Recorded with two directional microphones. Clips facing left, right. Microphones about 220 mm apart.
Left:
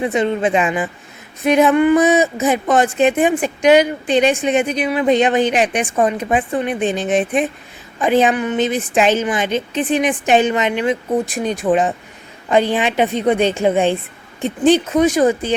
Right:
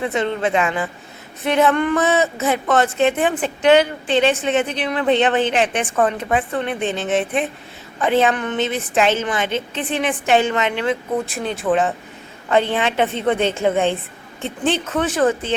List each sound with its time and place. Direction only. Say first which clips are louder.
0.0 s speech: left 3 dB; 15° left (ahead or behind)